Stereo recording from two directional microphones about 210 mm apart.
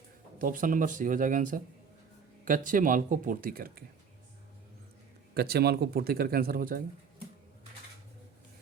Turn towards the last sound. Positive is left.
turn(degrees=-45)  # may be behind; listen again after turning